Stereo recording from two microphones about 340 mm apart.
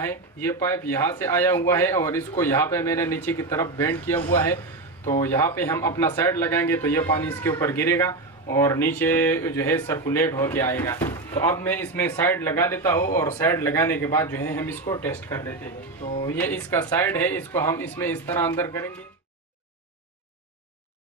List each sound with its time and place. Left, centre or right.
0.0 s speech: centre
16.0 s speech: left
16.3 s speech: centre